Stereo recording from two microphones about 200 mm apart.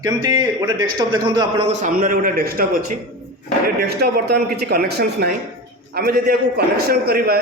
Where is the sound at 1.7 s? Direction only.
35° right (ahead or behind).